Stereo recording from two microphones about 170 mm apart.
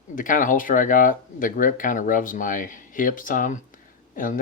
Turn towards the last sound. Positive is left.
turn(degrees=55)  # may be behind; listen again after turning